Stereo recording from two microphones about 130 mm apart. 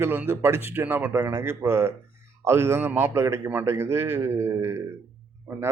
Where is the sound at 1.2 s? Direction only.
25° right (ahead or behind).